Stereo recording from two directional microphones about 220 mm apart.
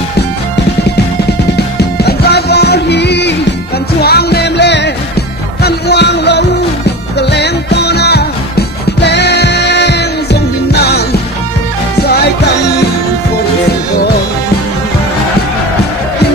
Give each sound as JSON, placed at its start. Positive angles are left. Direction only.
{"t": 1.8, "sound": "music", "side_deg": 45}